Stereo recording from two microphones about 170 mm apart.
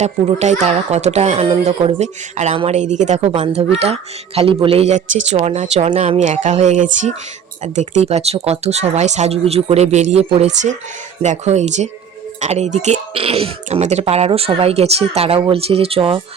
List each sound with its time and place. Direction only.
0.0 s speech: 40° right (ahead or behind)